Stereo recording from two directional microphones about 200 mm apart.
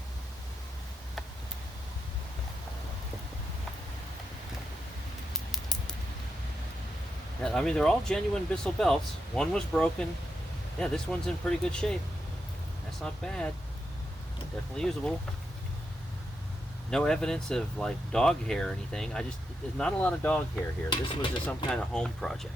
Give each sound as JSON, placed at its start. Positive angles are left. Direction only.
{"t": 5.5, "sound": "a sound", "side_deg": 0}
{"t": 7.4, "sound": "speech", "side_deg": 5}
{"t": 13.0, "sound": "speech", "side_deg": 5}
{"t": 14.8, "sound": "speech", "side_deg": 5}
{"t": 16.9, "sound": "speech", "side_deg": 5}
{"t": 20.9, "sound": "speech", "side_deg": 25}
{"t": 21.4, "sound": "speech", "side_deg": 5}